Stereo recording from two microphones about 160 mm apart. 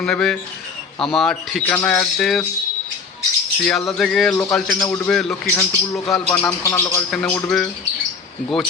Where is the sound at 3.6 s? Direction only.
5° left (ahead or behind).